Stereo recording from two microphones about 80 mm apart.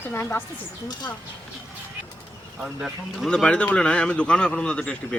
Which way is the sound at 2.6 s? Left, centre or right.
Centre.